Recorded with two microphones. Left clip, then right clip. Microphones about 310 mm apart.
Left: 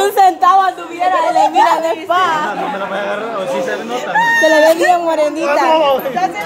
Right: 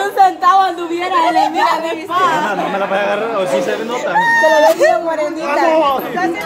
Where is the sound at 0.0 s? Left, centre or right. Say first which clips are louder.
Left 1 dB; left.